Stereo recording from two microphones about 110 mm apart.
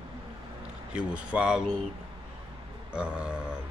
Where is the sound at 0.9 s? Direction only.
10° right (ahead or behind).